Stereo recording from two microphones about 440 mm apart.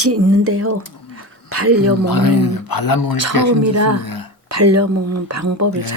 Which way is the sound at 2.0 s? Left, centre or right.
Left.